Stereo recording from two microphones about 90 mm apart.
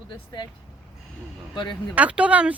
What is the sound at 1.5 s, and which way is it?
Speech, 55° left (ahead or behind).